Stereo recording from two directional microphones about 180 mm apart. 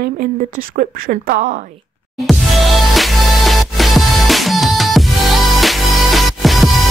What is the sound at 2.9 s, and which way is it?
Music, centre (ahead or behind).